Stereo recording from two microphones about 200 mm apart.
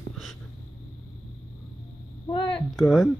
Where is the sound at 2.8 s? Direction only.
Centre (ahead or behind).